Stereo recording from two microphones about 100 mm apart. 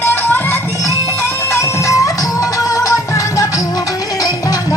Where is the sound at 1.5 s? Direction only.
35° left (ahead or behind).